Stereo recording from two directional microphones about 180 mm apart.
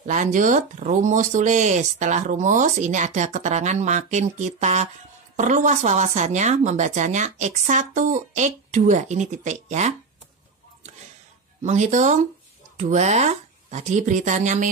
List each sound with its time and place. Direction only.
0.0 s speech: 45° right (ahead or behind)
11.6 s speech: 40° right (ahead or behind)